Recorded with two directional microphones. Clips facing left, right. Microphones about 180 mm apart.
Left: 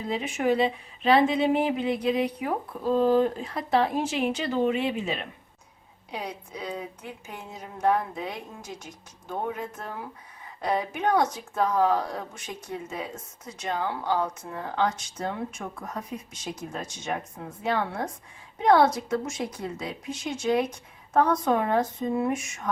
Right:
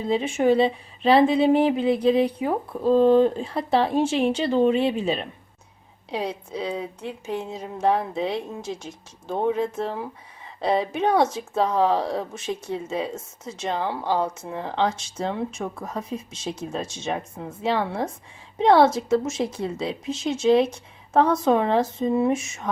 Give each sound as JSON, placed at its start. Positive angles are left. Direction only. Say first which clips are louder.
{"t": 0.0, "sound": "a woman's voice", "louder": "right 6 dB", "side_deg": -25}
{"t": 10.6, "sound": "a woman's voice", "louder": "right 5 dB", "side_deg": -25}